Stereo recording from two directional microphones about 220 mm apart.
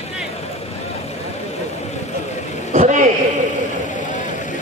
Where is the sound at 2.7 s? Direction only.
35° right (ahead or behind).